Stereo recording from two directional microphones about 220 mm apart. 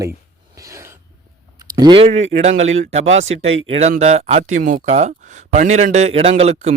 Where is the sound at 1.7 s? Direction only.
20° right (ahead or behind).